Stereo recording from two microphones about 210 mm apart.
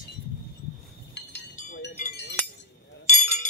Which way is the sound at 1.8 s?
50° left (ahead or behind).